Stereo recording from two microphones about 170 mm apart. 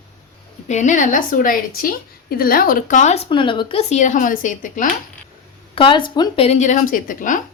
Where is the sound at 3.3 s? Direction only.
30° left (ahead or behind); by 4.8 s 50° left (ahead or behind).